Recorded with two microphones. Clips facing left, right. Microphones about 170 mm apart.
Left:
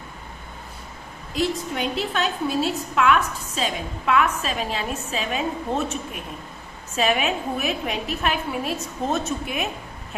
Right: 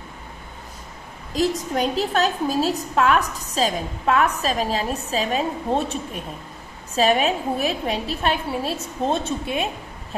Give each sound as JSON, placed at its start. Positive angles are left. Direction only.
{"t": 1.3, "sound": "a woman's voice", "side_deg": -40}